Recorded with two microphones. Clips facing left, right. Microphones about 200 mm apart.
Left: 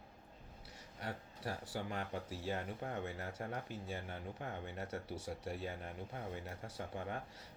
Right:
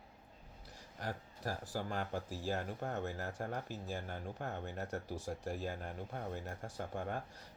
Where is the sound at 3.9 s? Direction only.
45° right (ahead or behind).